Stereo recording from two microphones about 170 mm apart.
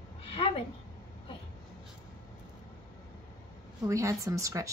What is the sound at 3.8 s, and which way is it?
Speech, 20° right (ahead or behind).